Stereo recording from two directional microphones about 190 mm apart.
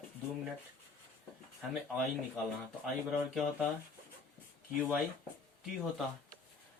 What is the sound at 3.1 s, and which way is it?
Speech, 5° right (ahead or behind).